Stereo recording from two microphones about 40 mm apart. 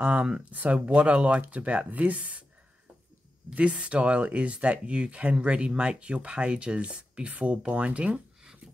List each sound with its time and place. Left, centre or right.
0.0 s speech: right
3.5 s speech: right